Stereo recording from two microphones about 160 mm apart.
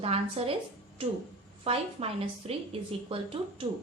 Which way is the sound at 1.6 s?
35° right (ahead or behind).